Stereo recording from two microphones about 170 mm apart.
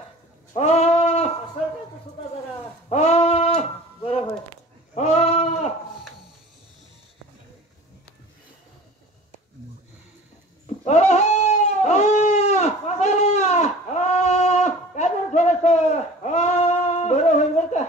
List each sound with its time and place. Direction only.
0.5 s goat: 40° left (ahead or behind)
2.9 s sheep: 40° left (ahead or behind)
4.9 s goat: 40° left (ahead or behind)
10.8 s a sound: 40° left (ahead or behind)